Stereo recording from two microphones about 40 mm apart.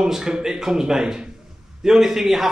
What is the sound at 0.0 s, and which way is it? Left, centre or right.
Speech, centre.